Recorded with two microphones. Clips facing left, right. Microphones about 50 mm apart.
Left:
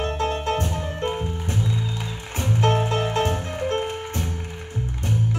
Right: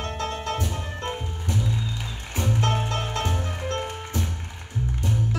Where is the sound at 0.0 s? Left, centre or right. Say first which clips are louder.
Left 5 dB; left.